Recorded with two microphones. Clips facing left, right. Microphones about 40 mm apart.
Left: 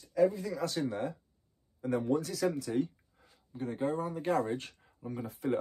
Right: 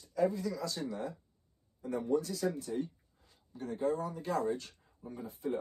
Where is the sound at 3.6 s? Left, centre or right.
Left.